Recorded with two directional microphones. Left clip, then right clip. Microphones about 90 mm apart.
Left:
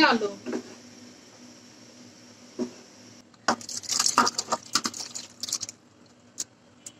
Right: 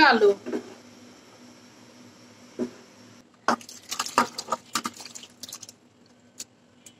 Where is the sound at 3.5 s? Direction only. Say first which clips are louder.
Right 1 dB; 35° left (ahead or behind).